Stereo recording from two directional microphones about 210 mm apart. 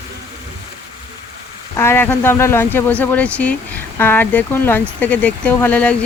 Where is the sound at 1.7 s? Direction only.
10° left (ahead or behind).